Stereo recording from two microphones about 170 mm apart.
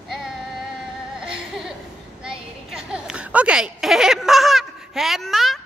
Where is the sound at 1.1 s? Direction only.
5° right (ahead or behind).